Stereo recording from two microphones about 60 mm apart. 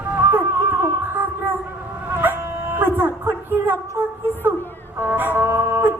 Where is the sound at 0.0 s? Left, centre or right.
Right.